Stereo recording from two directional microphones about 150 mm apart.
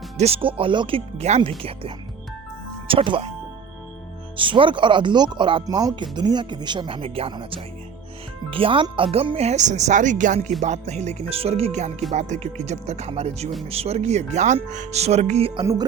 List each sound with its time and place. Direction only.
0.2 s speech: 40° right (ahead or behind)
4.4 s speech: 35° right (ahead or behind)